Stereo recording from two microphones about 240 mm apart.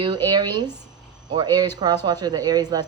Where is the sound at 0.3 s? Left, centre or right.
Centre.